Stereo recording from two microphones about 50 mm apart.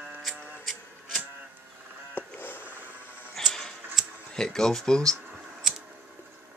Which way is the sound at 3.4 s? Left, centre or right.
Centre.